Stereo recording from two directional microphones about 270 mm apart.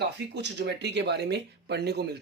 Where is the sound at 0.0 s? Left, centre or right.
Right.